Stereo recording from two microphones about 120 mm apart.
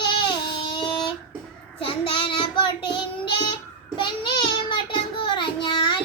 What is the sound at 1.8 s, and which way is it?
Child singing, 45° left (ahead or behind).